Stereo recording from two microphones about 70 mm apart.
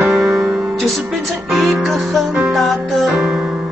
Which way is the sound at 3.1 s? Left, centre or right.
Centre.